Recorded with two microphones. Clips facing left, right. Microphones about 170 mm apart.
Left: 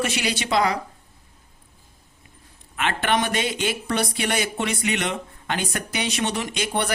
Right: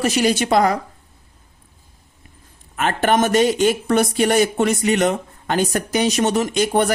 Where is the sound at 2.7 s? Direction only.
40° right (ahead or behind).